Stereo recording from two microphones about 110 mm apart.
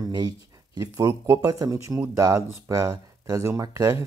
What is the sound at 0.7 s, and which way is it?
Speech, 30° right (ahead or behind).